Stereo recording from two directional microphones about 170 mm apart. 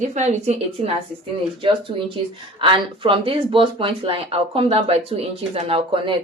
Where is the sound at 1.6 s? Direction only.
30° right (ahead or behind).